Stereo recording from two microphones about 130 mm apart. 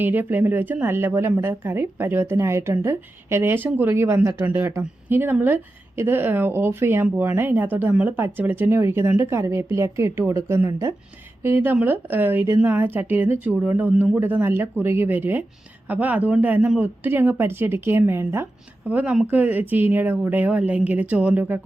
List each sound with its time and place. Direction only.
0.0 s a woman's voice: 15° right (ahead or behind)